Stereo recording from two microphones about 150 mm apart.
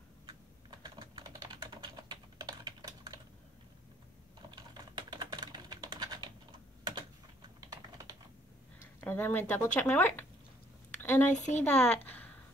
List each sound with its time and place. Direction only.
0.3 s typing: 30° right (ahead or behind)
4.5 s typing: 30° right (ahead or behind)
9.0 s speech: 15° left (ahead or behind)
11.0 s a sound: 10° left (ahead or behind)
11.3 s a woman's voice: 55° left (ahead or behind)
11.6 s a woman's voice: 10° left (ahead or behind)